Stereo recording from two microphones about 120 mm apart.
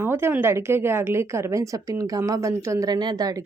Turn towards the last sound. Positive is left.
turn(degrees=-30)  # may be behind; listen again after turning